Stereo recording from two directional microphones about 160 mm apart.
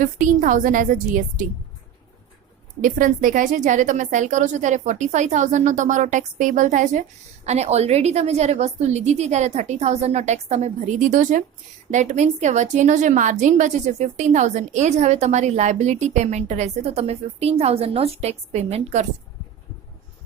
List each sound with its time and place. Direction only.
0.0 s a woman's voice: 55° right (ahead or behind)
2.8 s a woman's voice: 55° right (ahead or behind)